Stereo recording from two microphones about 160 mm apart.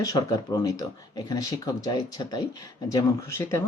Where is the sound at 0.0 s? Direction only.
20° left (ahead or behind).